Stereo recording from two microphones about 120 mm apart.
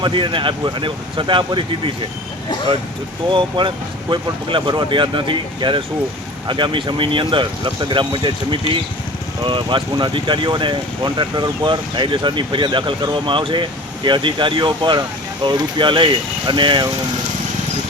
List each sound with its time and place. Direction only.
0.0 s speech: 40° right (ahead or behind)
3.2 s speech: 40° right (ahead or behind)